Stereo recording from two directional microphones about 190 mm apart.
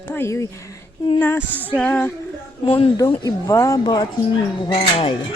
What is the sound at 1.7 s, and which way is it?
Female singing, 5° left (ahead or behind).